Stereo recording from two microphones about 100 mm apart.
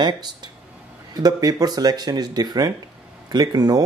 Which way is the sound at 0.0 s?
45° right (ahead or behind).